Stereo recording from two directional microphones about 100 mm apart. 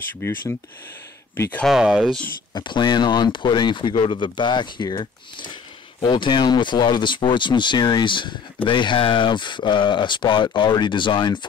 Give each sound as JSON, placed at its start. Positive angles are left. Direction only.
{"t": 0.2, "sound": "speech", "side_deg": 25}
{"t": 1.7, "sound": "speech", "side_deg": -5}
{"t": 2.5, "sound": "speech", "side_deg": 50}